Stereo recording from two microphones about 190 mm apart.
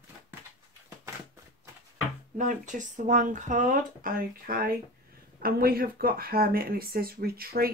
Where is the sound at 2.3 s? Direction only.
40° right (ahead or behind).